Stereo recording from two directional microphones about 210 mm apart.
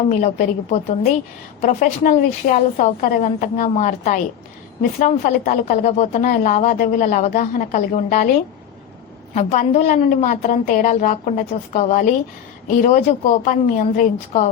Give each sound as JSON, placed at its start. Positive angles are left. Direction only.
{"t": 0.1, "sound": "a woman's voice", "side_deg": 35}
{"t": 9.3, "sound": "a woman's voice", "side_deg": 35}